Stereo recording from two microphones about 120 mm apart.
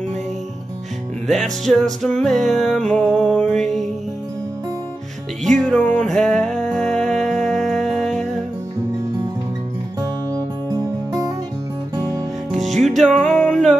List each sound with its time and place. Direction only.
1.2 s music: centre (ahead or behind)
5.4 s music: 5° left (ahead or behind)
10.3 s music: 30° right (ahead or behind)
12.4 s music: centre (ahead or behind)